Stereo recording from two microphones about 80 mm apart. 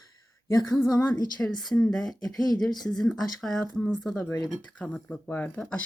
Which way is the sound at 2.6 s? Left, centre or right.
Left.